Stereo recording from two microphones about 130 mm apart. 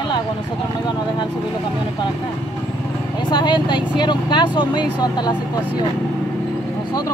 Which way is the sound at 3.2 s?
35° left (ahead or behind).